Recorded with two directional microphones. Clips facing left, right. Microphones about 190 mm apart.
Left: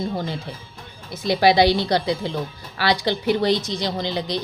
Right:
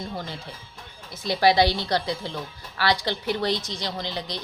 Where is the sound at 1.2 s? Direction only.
15° left (ahead or behind).